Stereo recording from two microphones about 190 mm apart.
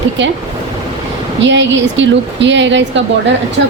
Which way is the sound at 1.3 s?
70° right (ahead or behind).